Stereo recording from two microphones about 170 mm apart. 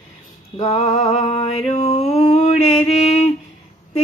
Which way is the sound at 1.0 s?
35° left (ahead or behind).